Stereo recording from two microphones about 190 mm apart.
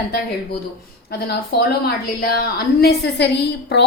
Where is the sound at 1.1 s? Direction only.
55° left (ahead or behind).